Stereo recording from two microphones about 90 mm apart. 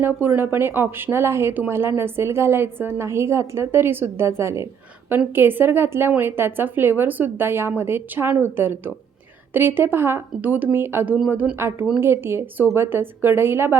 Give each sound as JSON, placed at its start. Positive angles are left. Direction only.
{"t": 0.0, "sound": "a woman's voice", "side_deg": -25}